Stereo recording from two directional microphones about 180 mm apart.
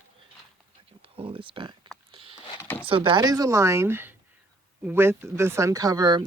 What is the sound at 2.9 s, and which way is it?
Speech, 30° right (ahead or behind).